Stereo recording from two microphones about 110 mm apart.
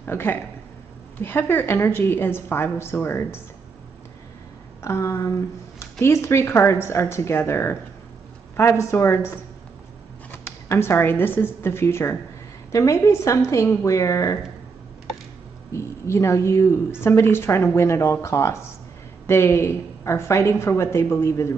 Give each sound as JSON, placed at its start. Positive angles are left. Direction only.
{"t": 0.0, "sound": "a woman's voice", "side_deg": 20}
{"t": 4.8, "sound": "a woman's voice", "side_deg": 30}
{"t": 10.3, "sound": "a woman's voice", "side_deg": 20}
{"t": 15.7, "sound": "a woman's voice", "side_deg": 25}